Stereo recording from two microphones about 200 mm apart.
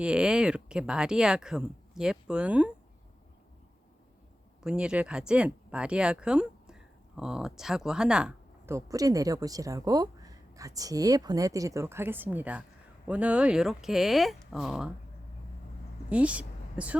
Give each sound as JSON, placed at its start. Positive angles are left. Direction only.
{"t": 0.0, "sound": "speech", "side_deg": -5}
{"t": 4.6, "sound": "speech", "side_deg": -5}
{"t": 16.0, "sound": "speech", "side_deg": -5}